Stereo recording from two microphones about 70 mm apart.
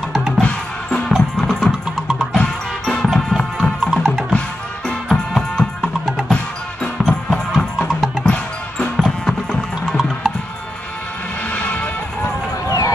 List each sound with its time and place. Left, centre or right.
0.4 s music: centre
2.3 s music: centre
6.3 s music: centre
8.9 s music: centre
11.5 s music: left
12.6 s run: left